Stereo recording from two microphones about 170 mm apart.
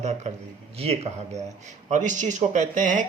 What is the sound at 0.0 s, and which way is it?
Speech, 40° right (ahead or behind).